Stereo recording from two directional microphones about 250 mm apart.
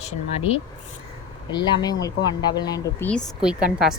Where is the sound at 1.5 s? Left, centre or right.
Centre.